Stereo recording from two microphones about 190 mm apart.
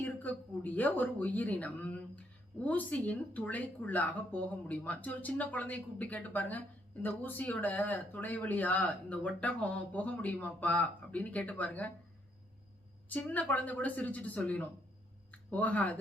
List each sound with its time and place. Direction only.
0.0 s speech: 10° left (ahead or behind)
13.1 s speech: 10° left (ahead or behind)